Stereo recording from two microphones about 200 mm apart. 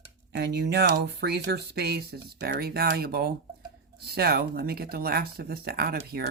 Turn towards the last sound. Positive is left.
turn(degrees=-50)  # may be behind; listen again after turning